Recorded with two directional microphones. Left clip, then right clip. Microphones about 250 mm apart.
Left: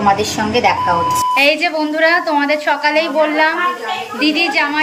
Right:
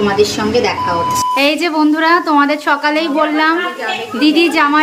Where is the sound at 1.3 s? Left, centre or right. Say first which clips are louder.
Even; centre.